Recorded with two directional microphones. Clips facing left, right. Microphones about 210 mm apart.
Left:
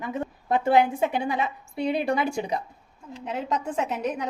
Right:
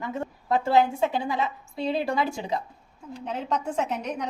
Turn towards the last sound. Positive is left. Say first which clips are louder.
# left 1 dB
turn(degrees=5)  # may be behind; listen again after turning